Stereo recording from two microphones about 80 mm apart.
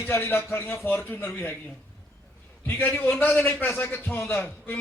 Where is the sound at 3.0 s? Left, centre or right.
Left.